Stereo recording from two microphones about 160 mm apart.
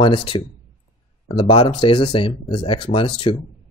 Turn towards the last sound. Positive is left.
turn(degrees=35)  # may be behind; listen again after turning